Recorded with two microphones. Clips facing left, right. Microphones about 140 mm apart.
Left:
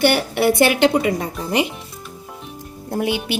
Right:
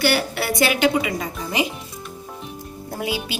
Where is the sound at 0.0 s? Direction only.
55° left (ahead or behind).